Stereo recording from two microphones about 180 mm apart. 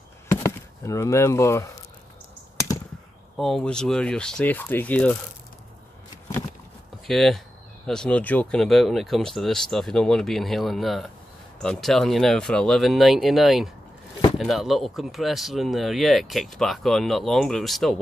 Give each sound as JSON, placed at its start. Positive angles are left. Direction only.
{"t": 0.3, "sound": "chop", "side_deg": 15}
{"t": 3.3, "sound": "speech", "side_deg": 0}
{"t": 7.1, "sound": "speech", "side_deg": 0}